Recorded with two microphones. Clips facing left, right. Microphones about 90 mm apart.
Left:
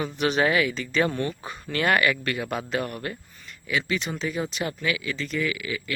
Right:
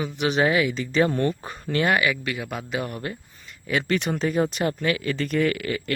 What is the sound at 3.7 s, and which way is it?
Speech, 50° right (ahead or behind).